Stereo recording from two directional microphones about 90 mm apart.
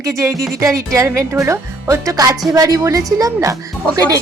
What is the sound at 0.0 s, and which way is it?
Speech, 35° right (ahead or behind).